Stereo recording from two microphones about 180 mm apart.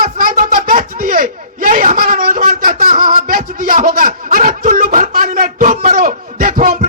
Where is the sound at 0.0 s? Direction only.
50° right (ahead or behind).